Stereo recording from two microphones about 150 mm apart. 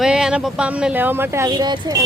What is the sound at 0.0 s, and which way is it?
Speech, 5° right (ahead or behind).